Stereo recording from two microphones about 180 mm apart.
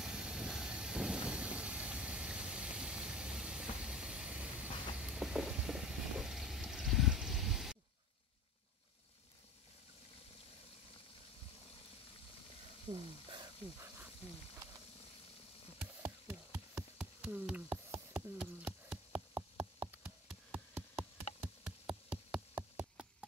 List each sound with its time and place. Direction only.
0.0 s vehicle: 5° right (ahead or behind)
12.9 s sizzle: 25° right (ahead or behind)
13.7 s snake: 15° right (ahead or behind)
15.8 s a sound: 10° right (ahead or behind)